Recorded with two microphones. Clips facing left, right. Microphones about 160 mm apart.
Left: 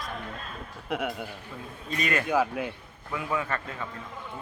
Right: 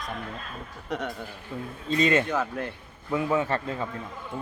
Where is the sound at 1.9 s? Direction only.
25° right (ahead or behind).